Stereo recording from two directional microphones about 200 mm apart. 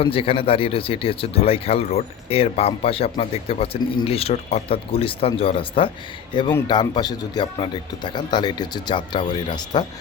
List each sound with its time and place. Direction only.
0.0 s speech: 25° left (ahead or behind)